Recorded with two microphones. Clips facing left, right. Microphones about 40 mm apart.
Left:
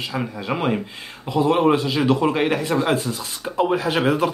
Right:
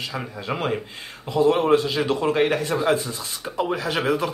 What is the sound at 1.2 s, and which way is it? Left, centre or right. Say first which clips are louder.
Speech: left 1 dB; left.